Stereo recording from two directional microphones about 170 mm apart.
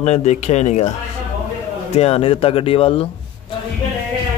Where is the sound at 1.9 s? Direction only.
35° left (ahead or behind).